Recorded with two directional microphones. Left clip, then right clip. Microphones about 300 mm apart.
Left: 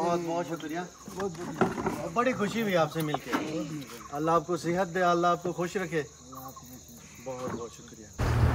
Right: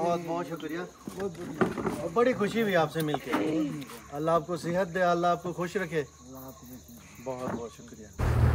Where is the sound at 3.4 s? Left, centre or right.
Right.